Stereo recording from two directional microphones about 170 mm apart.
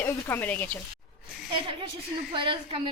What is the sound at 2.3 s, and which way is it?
Speech, 30° right (ahead or behind).